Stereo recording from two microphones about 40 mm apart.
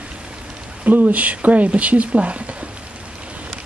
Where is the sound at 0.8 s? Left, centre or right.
Right.